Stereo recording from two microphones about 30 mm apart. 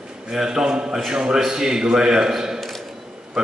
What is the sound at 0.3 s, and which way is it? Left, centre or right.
A man's voice, right.